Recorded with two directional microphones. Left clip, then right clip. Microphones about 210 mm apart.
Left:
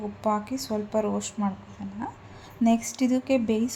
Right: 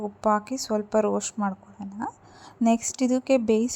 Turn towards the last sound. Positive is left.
turn(degrees=-40)  # may be behind; listen again after turning